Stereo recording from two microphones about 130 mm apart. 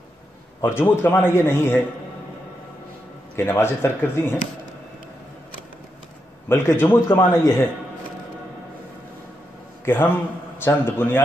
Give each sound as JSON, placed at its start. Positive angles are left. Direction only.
{"t": 0.7, "sound": "a man's voice", "side_deg": 15}
{"t": 3.3, "sound": "a man's voice", "side_deg": 20}
{"t": 6.5, "sound": "a man's voice", "side_deg": 20}
{"t": 9.8, "sound": "a man's voice", "side_deg": 15}